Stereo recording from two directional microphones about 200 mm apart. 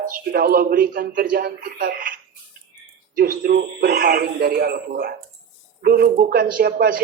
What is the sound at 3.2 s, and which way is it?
Speech, 45° right (ahead or behind).